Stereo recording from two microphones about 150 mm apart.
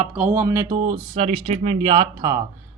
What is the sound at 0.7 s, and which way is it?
Speech, 35° right (ahead or behind).